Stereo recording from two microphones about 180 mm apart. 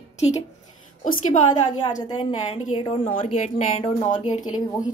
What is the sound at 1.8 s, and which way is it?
A woman's voice, 25° left (ahead or behind).